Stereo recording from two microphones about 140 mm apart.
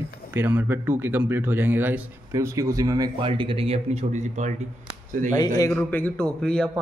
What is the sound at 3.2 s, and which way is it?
Speech, 40° right (ahead or behind).